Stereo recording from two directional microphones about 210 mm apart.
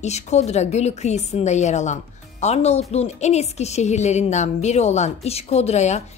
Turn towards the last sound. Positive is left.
turn(degrees=30)  # may be behind; listen again after turning